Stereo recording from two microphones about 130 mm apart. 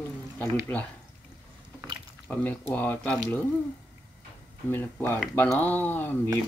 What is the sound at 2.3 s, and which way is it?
Speech, 15° left (ahead or behind).